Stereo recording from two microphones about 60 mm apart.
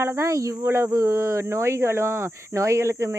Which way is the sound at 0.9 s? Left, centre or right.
Right.